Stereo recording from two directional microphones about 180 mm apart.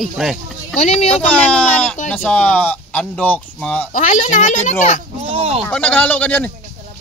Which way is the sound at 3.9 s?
45° left (ahead or behind).